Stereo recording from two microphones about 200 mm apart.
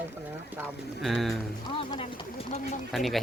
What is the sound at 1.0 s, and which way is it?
Speech, centre (ahead or behind).